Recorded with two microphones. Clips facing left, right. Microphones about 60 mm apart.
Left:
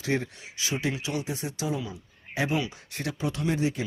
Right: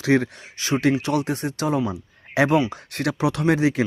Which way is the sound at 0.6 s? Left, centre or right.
Right.